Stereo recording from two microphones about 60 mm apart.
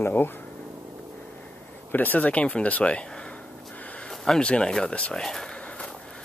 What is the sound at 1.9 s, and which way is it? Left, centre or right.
Speech, left.